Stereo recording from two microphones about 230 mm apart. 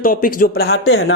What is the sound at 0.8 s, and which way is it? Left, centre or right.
Speech, left.